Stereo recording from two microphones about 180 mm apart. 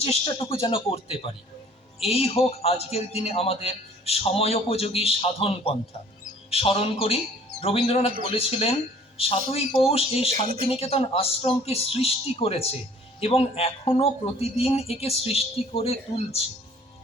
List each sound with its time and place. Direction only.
0.0 s a man's voice: 30° left (ahead or behind)
10.4 s speech: 50° right (ahead or behind)
10.7 s a man's voice: 35° left (ahead or behind)